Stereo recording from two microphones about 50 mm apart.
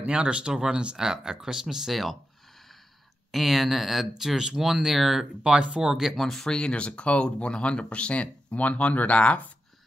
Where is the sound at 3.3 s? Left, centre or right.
Centre.